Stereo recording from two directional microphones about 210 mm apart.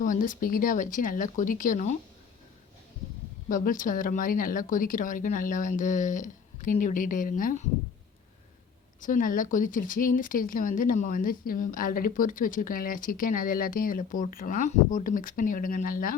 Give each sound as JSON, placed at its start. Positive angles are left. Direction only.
{"t": 0.0, "sound": "speech", "side_deg": 40}
{"t": 3.5, "sound": "speech", "side_deg": 40}
{"t": 9.0, "sound": "speech", "side_deg": 40}